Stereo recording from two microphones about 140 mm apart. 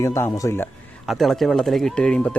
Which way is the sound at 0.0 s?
20° left (ahead or behind).